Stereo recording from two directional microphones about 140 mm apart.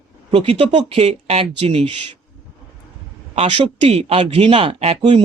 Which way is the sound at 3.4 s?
45° right (ahead or behind).